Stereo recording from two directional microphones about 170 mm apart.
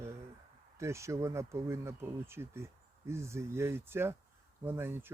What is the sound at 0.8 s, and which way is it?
Speech, 15° right (ahead or behind).